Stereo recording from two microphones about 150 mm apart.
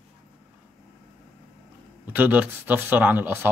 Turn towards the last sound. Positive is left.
turn(degrees=-15)  # may be behind; listen again after turning